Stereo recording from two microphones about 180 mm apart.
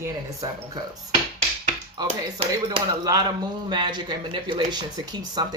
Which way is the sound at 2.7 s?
20° right (ahead or behind).